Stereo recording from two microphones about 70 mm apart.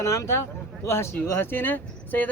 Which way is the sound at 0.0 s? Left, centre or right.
Left.